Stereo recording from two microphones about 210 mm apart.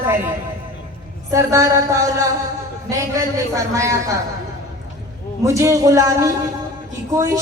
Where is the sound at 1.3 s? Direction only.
15° right (ahead or behind).